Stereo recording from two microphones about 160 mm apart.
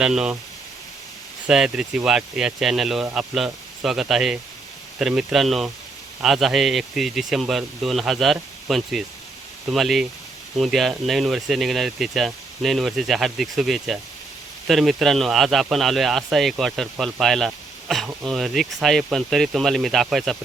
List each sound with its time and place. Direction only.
0.0 s speech: 5° right (ahead or behind)
1.5 s speech: 5° right (ahead or behind)